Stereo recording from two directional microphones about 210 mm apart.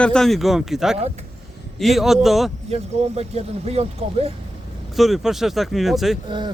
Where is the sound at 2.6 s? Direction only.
30° right (ahead or behind).